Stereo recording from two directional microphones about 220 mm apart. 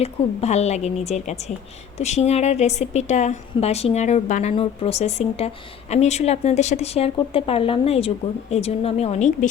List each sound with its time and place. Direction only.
0.0 s a woman's voice: 30° left (ahead or behind)